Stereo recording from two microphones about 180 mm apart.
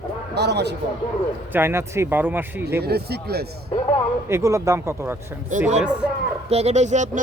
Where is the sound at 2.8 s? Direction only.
60° right (ahead or behind).